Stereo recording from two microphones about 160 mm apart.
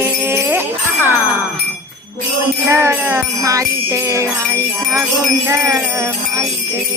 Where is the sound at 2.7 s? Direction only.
15° right (ahead or behind).